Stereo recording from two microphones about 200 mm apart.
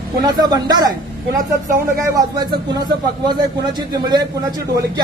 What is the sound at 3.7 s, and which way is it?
Speech, 20° right (ahead or behind).